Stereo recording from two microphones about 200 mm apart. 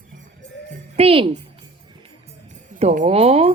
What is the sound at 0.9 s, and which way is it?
Speech, 25° right (ahead or behind).